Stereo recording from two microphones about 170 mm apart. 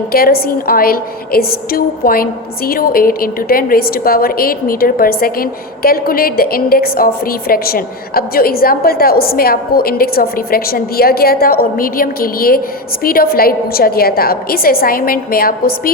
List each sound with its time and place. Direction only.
0.1 s a woman's voice: 60° left (ahead or behind)